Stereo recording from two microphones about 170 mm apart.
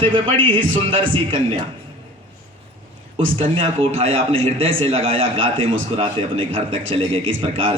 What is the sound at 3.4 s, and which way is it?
A man's voice, 35° right (ahead or behind).